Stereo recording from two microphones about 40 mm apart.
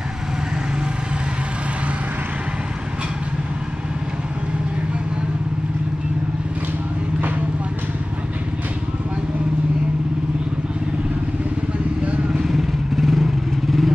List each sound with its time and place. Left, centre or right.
7.2 s vehicle: right
12.1 s vehicle: right
12.4 s vehicle: centre